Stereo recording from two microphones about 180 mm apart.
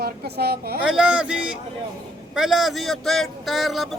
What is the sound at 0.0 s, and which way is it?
Speech, 60° right (ahead or behind).